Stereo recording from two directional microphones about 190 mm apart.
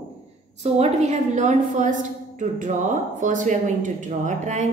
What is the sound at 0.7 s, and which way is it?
A woman's voice, 35° right (ahead or behind).